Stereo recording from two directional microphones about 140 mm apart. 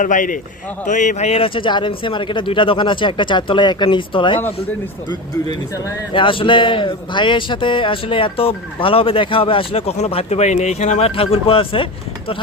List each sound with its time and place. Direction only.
0.0 s a man's voice: 70° left (ahead or behind); by 4.4 s 35° left (ahead or behind)
5.5 s a man's voice: 35° left (ahead or behind)